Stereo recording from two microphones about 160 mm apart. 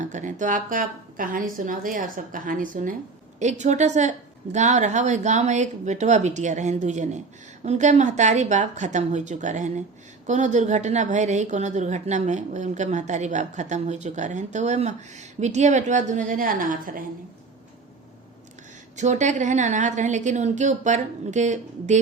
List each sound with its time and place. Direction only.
0.0 s a woman's voice: 50° right (ahead or behind)
18.9 s a woman's voice: 50° right (ahead or behind)